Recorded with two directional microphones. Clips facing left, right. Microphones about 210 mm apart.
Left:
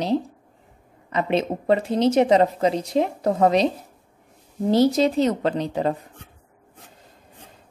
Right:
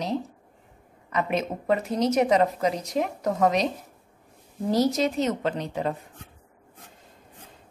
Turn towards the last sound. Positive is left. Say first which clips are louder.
# left 5 dB
turn(degrees=35)  # may be behind; listen again after turning